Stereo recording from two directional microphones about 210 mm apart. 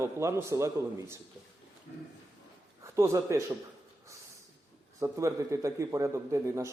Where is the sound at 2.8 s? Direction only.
15° right (ahead or behind).